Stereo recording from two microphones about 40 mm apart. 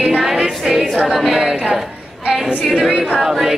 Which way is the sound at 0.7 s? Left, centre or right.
Centre.